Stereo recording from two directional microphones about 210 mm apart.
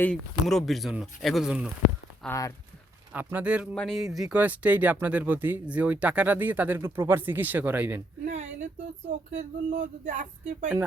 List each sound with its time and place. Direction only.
0.0 s speech: 5° left (ahead or behind)
2.2 s speech: 15° left (ahead or behind)
3.1 s speech: 10° right (ahead or behind)
8.3 s speech: 30° right (ahead or behind)